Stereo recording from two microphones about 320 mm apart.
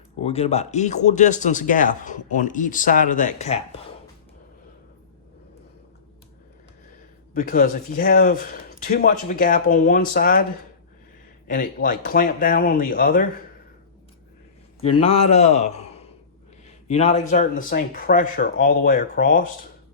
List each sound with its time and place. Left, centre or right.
0.2 s speech: centre
7.3 s speech: left
11.4 s speech: left
14.8 s a man's voice: centre